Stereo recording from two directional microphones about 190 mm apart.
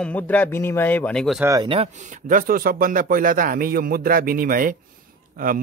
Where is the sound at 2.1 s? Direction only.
45° right (ahead or behind).